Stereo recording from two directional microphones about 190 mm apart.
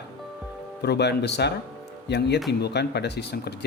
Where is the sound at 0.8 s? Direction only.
60° left (ahead or behind).